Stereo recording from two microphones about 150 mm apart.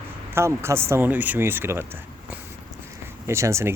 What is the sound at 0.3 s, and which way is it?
Speech, 15° right (ahead or behind).